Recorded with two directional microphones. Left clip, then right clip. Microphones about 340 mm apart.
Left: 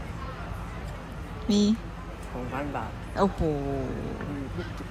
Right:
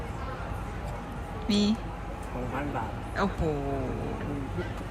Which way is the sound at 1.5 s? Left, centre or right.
Centre.